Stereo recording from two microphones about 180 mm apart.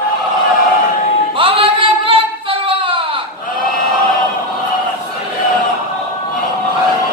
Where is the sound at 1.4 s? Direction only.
30° right (ahead or behind).